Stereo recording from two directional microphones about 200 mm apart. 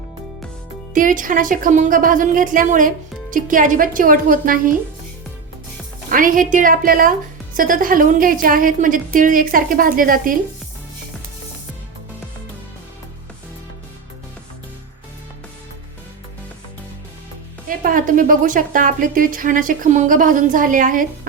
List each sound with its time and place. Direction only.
0.9 s a woman's voice: 40° right (ahead or behind)
6.1 s a woman's voice: 45° right (ahead or behind)
17.7 s a woman's voice: 45° right (ahead or behind)